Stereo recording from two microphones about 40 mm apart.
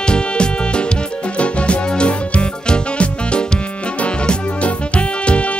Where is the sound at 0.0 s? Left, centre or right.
Left.